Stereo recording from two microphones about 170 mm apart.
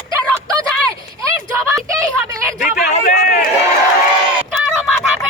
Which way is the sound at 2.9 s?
50° left (ahead or behind).